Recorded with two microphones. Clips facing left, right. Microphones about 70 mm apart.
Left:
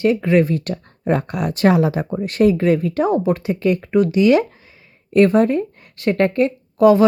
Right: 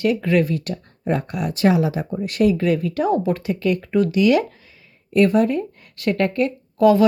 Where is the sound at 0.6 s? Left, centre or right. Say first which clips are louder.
Left 3 dB; left.